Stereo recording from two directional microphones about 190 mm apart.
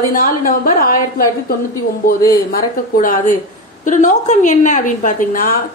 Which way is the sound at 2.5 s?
45° left (ahead or behind).